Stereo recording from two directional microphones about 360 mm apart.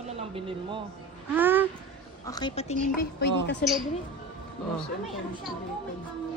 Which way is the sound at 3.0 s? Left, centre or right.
Left.